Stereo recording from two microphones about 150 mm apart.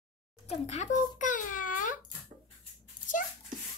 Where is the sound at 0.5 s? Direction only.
50° left (ahead or behind).